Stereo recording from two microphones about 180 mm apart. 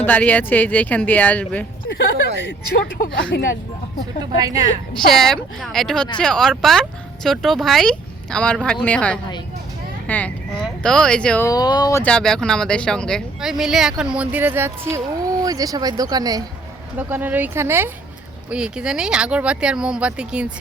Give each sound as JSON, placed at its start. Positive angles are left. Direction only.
{"t": 0.0, "sound": "speech", "side_deg": 10}
{"t": 2.4, "sound": "speech", "side_deg": 75}
{"t": 3.3, "sound": "speech", "side_deg": 65}
{"t": 4.2, "sound": "speech", "side_deg": -20}
{"t": 4.9, "sound": "speech", "side_deg": 0}
{"t": 11.4, "sound": "speech", "side_deg": 20}
{"t": 12.0, "sound": "speech", "side_deg": 5}
{"t": 17.0, "sound": "speech", "side_deg": -10}